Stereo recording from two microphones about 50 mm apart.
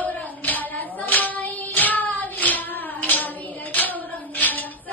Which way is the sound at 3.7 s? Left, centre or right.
Left.